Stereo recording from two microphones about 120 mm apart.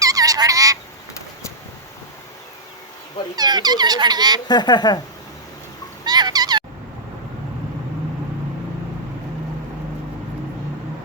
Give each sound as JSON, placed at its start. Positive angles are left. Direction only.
{"t": 0.0, "sound": "frog", "side_deg": -30}
{"t": 3.3, "sound": "speech", "side_deg": -35}
{"t": 4.4, "sound": "speech", "side_deg": 35}
{"t": 6.1, "sound": "cat", "side_deg": -35}